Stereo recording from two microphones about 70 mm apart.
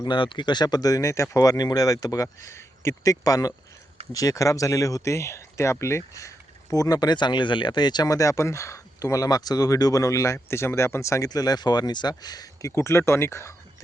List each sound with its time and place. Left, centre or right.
0.0 s speech: left
1.4 s speech: left
8.1 s speech: left
11.3 s speech: left
12.7 s speech: left